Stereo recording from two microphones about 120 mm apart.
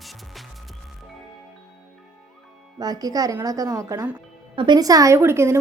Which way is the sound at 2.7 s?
30° right (ahead or behind).